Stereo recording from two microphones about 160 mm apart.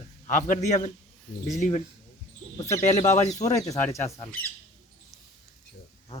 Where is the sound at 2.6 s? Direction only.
20° left (ahead or behind).